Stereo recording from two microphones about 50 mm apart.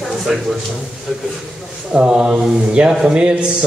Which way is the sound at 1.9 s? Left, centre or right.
Centre.